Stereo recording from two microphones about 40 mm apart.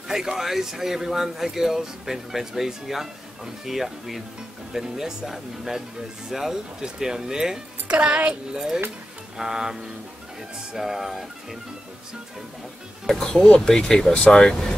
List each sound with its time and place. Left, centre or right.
0.1 s a man's voice: centre
7.9 s speech: right
8.5 s a man's voice: centre
13.3 s speech: left